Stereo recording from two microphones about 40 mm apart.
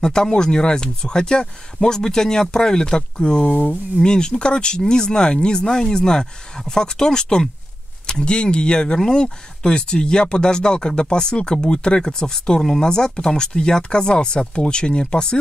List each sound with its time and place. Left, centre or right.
0.0 s speech: centre